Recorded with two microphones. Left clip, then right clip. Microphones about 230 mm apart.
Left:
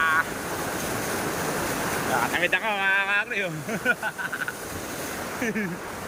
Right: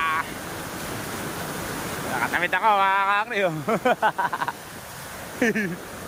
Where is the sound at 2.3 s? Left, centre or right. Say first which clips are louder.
Right 4 dB; centre.